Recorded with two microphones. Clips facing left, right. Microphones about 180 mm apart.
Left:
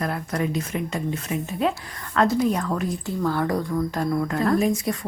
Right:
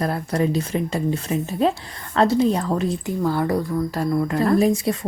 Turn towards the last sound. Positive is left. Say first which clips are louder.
# right 4 dB
turn(degrees=-25)  # may be behind; listen again after turning